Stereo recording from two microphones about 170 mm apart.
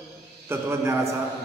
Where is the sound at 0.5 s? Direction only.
15° right (ahead or behind).